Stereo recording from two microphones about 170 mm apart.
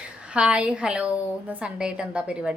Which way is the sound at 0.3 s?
5° right (ahead or behind).